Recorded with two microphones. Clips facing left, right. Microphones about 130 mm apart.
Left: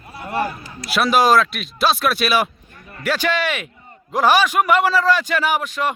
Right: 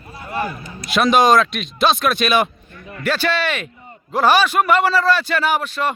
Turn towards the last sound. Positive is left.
turn(degrees=15)  # may be behind; listen again after turning